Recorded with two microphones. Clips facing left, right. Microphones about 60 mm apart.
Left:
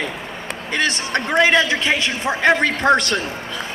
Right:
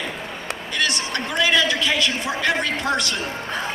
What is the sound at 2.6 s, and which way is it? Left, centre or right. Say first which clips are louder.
Speech: left 6 dB; left.